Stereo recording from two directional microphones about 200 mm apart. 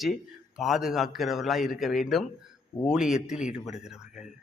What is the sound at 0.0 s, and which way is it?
A man's voice, centre (ahead or behind).